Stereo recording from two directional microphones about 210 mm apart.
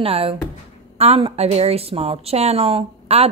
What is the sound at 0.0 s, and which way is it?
A woman's voice, 25° right (ahead or behind).